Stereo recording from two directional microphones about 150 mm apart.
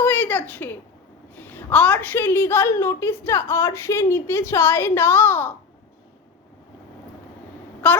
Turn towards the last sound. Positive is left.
turn(degrees=10)  # may be behind; listen again after turning